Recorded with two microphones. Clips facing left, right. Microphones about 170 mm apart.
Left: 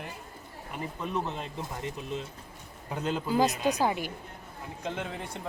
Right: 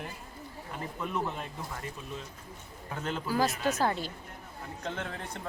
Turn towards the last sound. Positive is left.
turn(degrees=10)  # may be behind; listen again after turning